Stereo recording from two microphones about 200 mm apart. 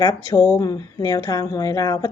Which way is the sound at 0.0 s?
20° left (ahead or behind).